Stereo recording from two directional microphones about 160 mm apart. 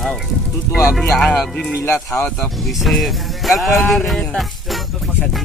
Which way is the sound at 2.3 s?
Centre (ahead or behind).